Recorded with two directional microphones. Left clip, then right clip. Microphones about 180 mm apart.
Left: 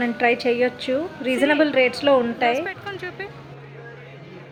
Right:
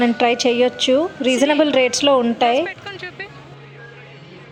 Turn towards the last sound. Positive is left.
turn(degrees=15)  # may be behind; listen again after turning